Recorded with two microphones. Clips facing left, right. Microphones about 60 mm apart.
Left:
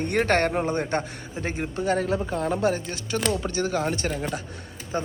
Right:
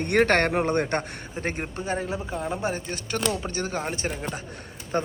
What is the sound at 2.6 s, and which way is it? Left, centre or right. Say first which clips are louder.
Speech: left 4 dB; right.